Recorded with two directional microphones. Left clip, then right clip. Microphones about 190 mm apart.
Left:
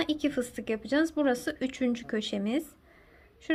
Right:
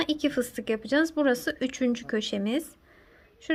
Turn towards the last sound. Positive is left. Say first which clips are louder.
# right 1 dB
turn(degrees=-15)  # may be behind; listen again after turning